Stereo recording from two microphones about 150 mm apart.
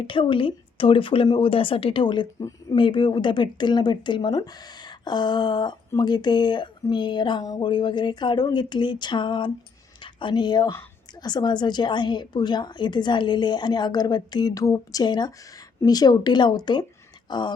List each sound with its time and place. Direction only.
0.0 s a woman's voice: 35° left (ahead or behind)